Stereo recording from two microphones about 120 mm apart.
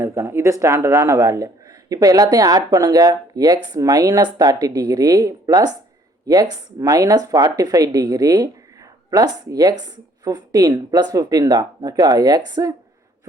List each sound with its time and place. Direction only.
0.0 s speech: 20° right (ahead or behind)